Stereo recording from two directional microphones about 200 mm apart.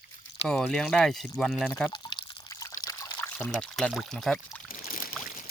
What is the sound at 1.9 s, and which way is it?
Drip, 20° left (ahead or behind).